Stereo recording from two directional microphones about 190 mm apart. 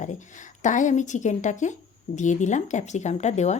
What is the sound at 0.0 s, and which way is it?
Speech, 40° left (ahead or behind).